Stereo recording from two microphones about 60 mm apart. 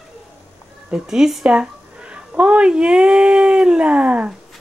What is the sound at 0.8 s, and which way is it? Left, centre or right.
Speech, centre.